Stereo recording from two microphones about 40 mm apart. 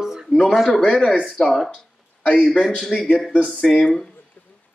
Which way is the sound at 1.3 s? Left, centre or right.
Centre.